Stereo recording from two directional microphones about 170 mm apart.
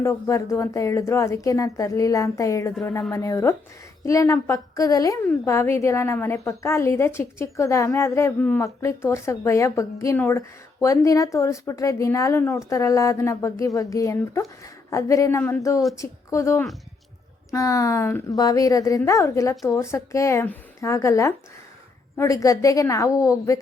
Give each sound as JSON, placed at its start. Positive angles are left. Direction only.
{"t": 0.0, "sound": "a woman's voice", "side_deg": 15}